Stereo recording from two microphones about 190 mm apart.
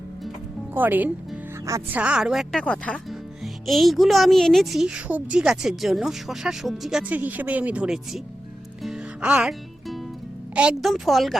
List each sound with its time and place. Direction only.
0.7 s speech: 10° right (ahead or behind)
8.8 s music: 5° right (ahead or behind)
10.5 s speech: 5° right (ahead or behind)